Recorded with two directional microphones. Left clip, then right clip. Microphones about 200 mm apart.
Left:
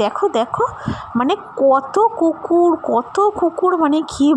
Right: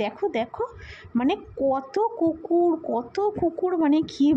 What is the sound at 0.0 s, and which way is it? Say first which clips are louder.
A woman's voice: left 9 dB; 20° left (ahead or behind).